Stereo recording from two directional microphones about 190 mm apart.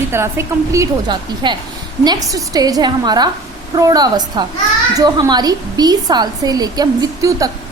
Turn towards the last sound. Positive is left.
turn(degrees=-20)  # may be behind; listen again after turning